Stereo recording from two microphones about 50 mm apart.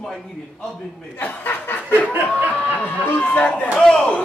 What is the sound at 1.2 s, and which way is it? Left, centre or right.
Speech, left.